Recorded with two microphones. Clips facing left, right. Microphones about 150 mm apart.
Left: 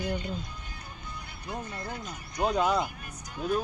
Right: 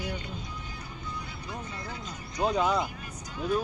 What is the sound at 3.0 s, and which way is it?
Vehicle, 50° left (ahead or behind).